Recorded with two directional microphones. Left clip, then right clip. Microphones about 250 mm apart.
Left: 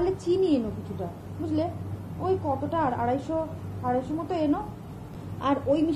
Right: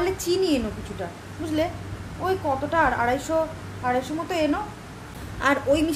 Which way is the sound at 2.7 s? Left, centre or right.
Centre.